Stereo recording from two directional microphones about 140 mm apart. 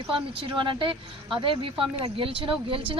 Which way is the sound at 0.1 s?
35° right (ahead or behind).